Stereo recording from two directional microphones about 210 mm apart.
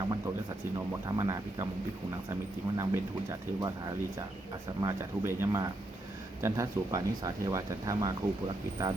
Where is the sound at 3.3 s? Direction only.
15° right (ahead or behind).